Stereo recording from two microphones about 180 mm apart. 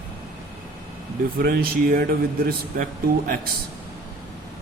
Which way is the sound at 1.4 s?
55° right (ahead or behind).